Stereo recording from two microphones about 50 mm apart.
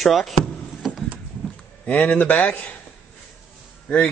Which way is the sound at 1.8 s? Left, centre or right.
Left.